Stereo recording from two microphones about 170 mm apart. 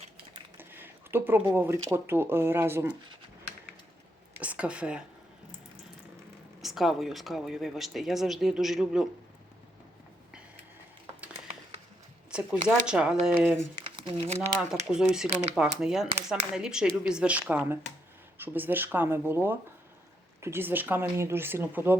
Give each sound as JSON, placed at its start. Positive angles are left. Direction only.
{"t": 0.5, "sound": "a sound", "side_deg": -10}
{"t": 1.5, "sound": "speech", "side_deg": -15}
{"t": 4.4, "sound": "a woman's voice", "side_deg": -10}
{"t": 6.6, "sound": "speech", "side_deg": 0}
{"t": 12.3, "sound": "speech", "side_deg": -5}
{"t": 14.1, "sound": "speech", "side_deg": -35}
{"t": 14.8, "sound": "speech", "side_deg": -5}
{"t": 15.3, "sound": "speech", "side_deg": -40}
{"t": 15.8, "sound": "speech", "side_deg": -5}